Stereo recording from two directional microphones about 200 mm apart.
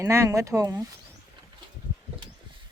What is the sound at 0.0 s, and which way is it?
Speech, 15° right (ahead or behind).